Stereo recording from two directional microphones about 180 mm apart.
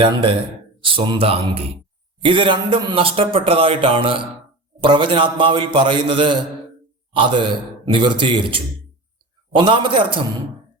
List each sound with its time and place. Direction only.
0.0 s speech: 30° right (ahead or behind)